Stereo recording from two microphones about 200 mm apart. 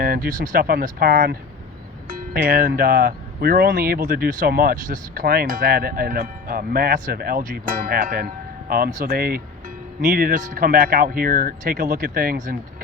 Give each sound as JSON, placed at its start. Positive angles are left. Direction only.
{"t": 0.0, "sound": "speech", "side_deg": -45}